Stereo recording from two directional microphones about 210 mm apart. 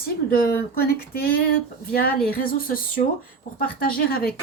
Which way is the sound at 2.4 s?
40° left (ahead or behind).